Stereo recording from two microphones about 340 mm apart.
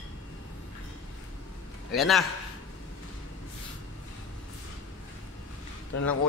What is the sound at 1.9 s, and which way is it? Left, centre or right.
Speech, centre.